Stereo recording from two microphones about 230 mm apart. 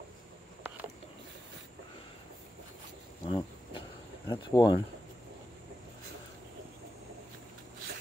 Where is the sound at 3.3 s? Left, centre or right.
Left.